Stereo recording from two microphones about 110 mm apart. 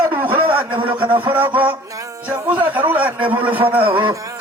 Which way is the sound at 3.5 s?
50° right (ahead or behind).